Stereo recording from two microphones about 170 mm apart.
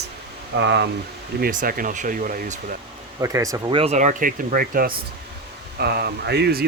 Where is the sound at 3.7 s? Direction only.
40° right (ahead or behind); by 4.9 s 55° right (ahead or behind).